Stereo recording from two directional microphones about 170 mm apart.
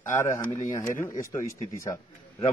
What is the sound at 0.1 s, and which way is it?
A man's voice, 15° left (ahead or behind).